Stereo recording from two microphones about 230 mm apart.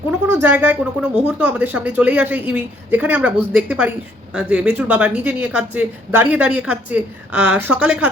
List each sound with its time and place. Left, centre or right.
0.3 s a woman's voice: centre